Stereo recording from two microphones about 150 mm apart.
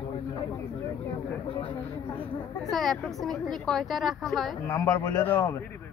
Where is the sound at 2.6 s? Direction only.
Centre (ahead or behind).